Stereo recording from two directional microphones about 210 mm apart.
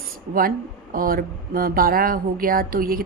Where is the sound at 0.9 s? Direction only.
45° right (ahead or behind).